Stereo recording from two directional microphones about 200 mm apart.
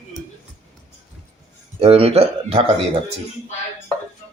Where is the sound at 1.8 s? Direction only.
30° right (ahead or behind).